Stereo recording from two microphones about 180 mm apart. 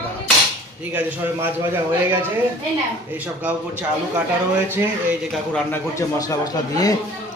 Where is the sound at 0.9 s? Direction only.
10° right (ahead or behind).